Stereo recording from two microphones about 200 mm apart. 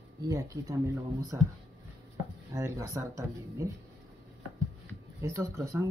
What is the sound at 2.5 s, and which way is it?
A woman's voice, 15° right (ahead or behind).